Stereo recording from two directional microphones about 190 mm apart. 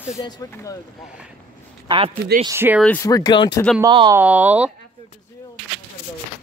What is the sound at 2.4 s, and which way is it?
Speech, 15° right (ahead or behind).